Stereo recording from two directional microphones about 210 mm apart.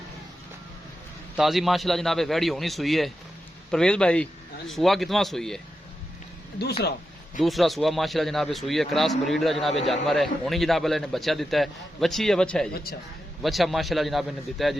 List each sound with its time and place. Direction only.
1.4 s a man's voice: centre (ahead or behind)
7.3 s a man's voice: centre (ahead or behind)